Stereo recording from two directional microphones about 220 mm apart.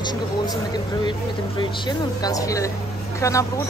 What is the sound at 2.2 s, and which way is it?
Speech, 15° left (ahead or behind).